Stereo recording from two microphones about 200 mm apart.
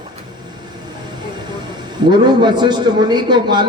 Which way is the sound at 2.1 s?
20° right (ahead or behind).